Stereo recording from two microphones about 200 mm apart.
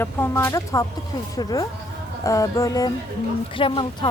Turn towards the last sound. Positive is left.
turn(degrees=25)  # may be behind; listen again after turning